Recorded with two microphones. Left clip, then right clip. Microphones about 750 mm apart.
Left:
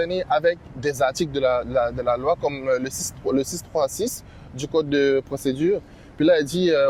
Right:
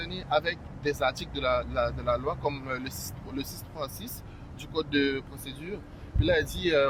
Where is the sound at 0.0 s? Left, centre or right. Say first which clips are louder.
Left 9 dB; left.